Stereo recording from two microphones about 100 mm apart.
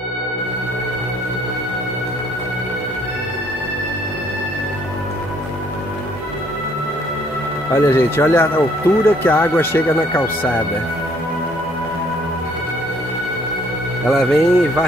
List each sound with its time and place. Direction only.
7.7 s speech: 25° left (ahead or behind)
14.2 s speech: 5° left (ahead or behind)